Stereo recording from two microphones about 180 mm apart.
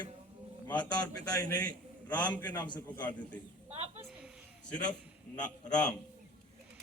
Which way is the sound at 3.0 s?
5° left (ahead or behind).